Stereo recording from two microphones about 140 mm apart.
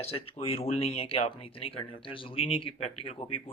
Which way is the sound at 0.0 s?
45° left (ahead or behind).